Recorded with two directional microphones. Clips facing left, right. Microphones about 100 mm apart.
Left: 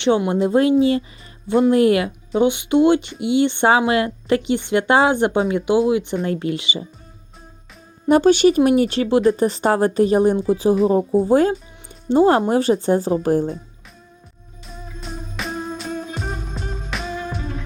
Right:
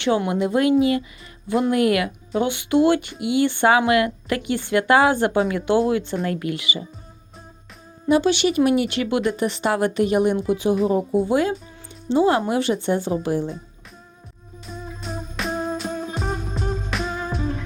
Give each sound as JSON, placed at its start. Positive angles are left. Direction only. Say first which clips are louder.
{"t": 0.3, "sound": "speech", "louder": "left 3 dB", "side_deg": 30}
{"t": 6.2, "sound": "speech", "louder": "left 3 dB", "side_deg": 30}
{"t": 8.0, "sound": "speech", "louder": "left 5 dB", "side_deg": 45}
{"t": 14.7, "sound": "music", "louder": "right 2 dB", "side_deg": 0}